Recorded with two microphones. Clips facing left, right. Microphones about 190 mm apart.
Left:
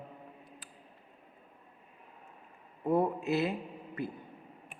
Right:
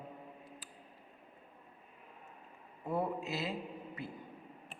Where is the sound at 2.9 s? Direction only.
55° left (ahead or behind).